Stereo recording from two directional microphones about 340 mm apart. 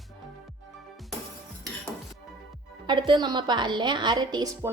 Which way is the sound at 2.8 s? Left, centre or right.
Centre.